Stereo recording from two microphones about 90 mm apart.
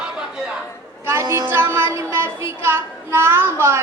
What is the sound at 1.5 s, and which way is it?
Music, 25° right (ahead or behind).